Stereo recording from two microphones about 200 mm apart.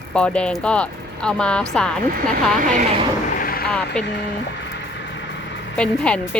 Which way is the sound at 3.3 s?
45° left (ahead or behind).